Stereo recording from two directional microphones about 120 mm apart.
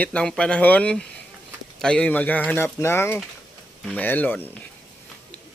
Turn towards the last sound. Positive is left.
turn(degrees=15)  # may be behind; listen again after turning